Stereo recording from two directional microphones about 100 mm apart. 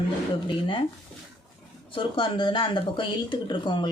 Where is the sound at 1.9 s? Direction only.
60° left (ahead or behind).